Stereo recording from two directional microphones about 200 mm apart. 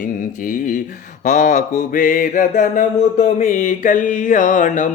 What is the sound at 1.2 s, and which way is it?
Mantra, 40° left (ahead or behind).